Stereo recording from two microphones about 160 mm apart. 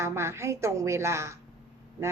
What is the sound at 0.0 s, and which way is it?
A woman's voice, 15° right (ahead or behind).